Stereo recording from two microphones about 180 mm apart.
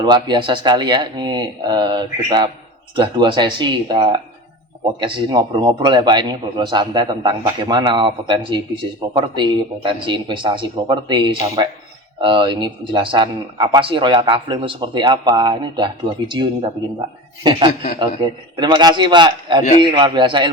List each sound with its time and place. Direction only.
0.0 s a man's voice: 25° right (ahead or behind)